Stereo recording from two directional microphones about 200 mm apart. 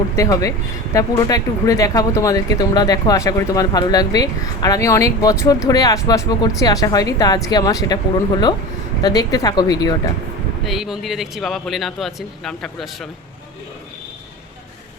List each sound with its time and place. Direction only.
0.2 s speech: 15° left (ahead or behind)
9.0 s speech: 20° left (ahead or behind)
10.7 s speech: centre (ahead or behind)